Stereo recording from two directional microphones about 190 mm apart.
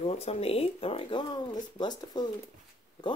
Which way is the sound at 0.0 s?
30° left (ahead or behind).